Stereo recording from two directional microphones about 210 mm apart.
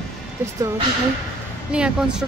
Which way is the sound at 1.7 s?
5° right (ahead or behind).